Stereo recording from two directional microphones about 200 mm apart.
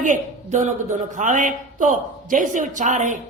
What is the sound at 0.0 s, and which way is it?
A man's voice, 35° right (ahead or behind).